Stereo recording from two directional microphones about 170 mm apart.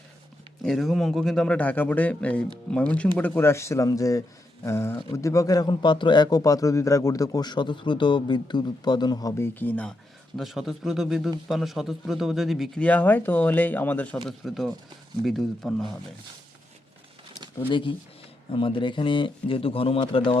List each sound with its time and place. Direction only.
0.6 s a man's voice: centre (ahead or behind); by 9.5 s 20° left (ahead or behind)
9.6 s a man's voice: 10° left (ahead or behind)
17.7 s a man's voice: 30° left (ahead or behind)